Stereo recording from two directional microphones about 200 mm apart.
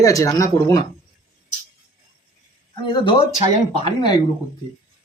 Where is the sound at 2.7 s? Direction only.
25° left (ahead or behind).